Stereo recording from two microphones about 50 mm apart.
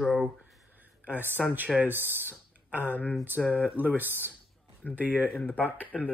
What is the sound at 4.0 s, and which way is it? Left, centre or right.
Speech, right.